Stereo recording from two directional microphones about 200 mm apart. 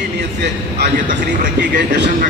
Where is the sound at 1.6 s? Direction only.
60° right (ahead or behind).